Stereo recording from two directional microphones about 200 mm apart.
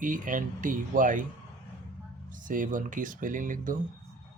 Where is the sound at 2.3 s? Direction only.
40° right (ahead or behind).